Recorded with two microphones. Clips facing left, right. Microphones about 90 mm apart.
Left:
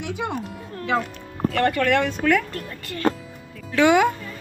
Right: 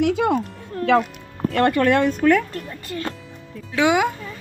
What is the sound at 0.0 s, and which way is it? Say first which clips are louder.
Speech: right 10 dB; 70° right (ahead or behind).